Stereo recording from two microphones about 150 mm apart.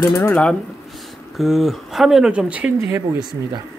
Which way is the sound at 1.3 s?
Centre (ahead or behind).